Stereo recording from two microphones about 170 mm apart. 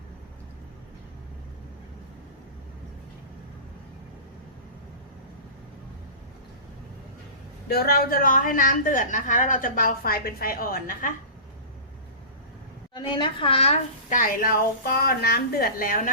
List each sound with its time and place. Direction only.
7.7 s a woman's voice: 65° left (ahead or behind)
12.9 s a woman's voice: 25° left (ahead or behind)
14.2 s a woman's voice: 55° left (ahead or behind)